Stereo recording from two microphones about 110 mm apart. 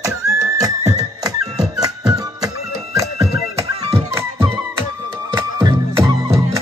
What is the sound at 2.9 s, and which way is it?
Music, 30° right (ahead or behind).